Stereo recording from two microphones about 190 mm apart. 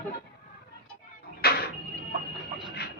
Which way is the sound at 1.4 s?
55° left (ahead or behind).